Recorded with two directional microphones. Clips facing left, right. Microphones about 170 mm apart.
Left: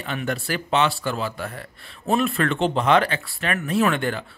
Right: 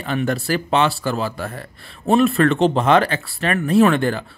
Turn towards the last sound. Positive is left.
turn(degrees=-35)  # may be behind; listen again after turning